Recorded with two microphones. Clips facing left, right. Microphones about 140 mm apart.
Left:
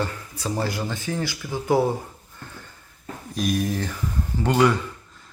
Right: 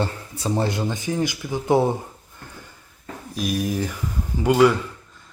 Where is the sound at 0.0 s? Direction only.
25° right (ahead or behind).